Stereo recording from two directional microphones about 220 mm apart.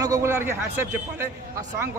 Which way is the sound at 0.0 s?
15° right (ahead or behind).